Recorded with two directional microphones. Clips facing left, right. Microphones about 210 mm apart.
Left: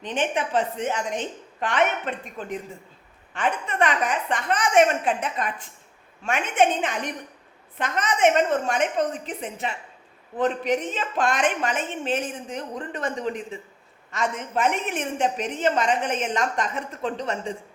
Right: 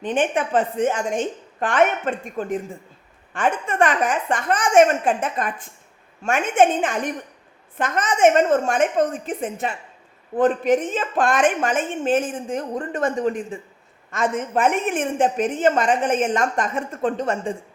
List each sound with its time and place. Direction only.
0.0 s a woman's voice: 50° right (ahead or behind)